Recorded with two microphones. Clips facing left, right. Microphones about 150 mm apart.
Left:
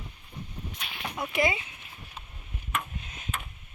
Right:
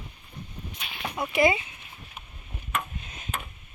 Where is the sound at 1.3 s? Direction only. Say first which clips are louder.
Right 5 dB; 10° right (ahead or behind).